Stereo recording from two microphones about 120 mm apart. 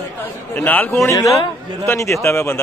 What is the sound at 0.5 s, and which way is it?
Speech, 15° left (ahead or behind).